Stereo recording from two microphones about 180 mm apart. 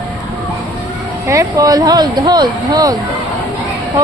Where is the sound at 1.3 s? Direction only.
20° right (ahead or behind).